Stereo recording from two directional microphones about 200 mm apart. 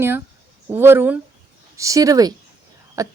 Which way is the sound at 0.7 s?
10° right (ahead or behind).